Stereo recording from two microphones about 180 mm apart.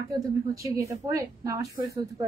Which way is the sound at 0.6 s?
15° right (ahead or behind).